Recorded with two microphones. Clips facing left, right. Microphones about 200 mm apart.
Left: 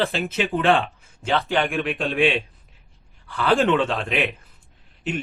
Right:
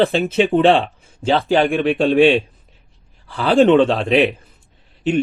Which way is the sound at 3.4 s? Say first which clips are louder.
Right 7 dB; 35° right (ahead or behind).